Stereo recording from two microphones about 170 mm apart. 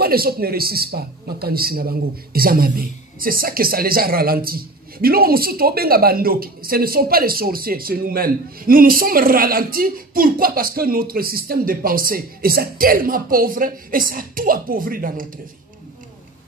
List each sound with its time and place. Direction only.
0.0 s a man's voice: 65° right (ahead or behind)